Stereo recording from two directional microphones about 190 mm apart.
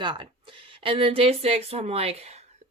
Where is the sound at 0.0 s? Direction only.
25° right (ahead or behind).